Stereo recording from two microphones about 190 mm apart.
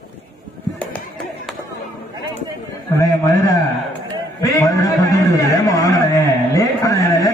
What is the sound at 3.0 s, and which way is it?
Speech, 15° left (ahead or behind).